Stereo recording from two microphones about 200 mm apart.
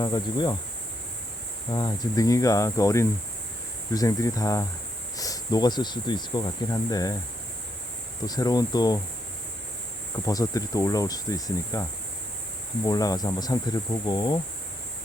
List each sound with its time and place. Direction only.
0.0 s speech: 20° left (ahead or behind)
1.7 s speech: 20° left (ahead or behind)
8.3 s speech: 20° left (ahead or behind)
10.2 s speech: 15° left (ahead or behind)